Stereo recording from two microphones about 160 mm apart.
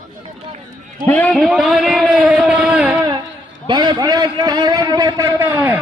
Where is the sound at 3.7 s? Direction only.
30° right (ahead or behind).